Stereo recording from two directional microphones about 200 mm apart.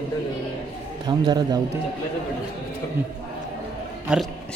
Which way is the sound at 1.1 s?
20° right (ahead or behind).